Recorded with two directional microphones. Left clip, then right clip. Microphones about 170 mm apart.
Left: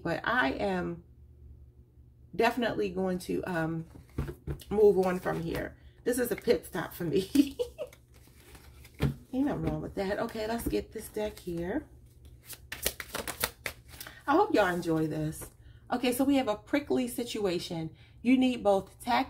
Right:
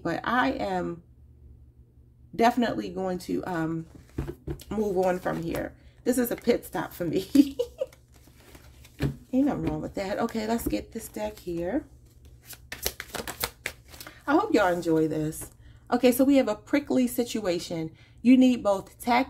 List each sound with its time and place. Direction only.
0.0 s speech: 40° right (ahead or behind)
2.3 s speech: 35° right (ahead or behind)
9.8 s speech: 45° right (ahead or behind)
12.8 s shuffling cards: 15° right (ahead or behind)
13.8 s speech: 40° right (ahead or behind)